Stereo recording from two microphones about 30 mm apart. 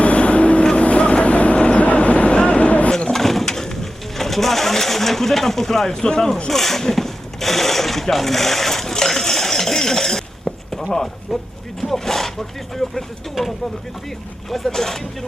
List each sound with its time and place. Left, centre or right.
0.0 s vehicle: left
3.1 s a sound: centre
3.4 s bird: centre
4.2 s speech: centre
5.9 s speech: left
6.5 s sewing machine: centre
10.5 s chop: centre
10.9 s speech: centre
13.4 s speech: centre
14.7 s speech: centre